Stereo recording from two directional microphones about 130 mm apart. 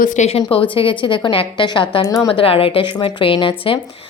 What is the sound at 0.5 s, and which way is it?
A woman's voice, 45° left (ahead or behind).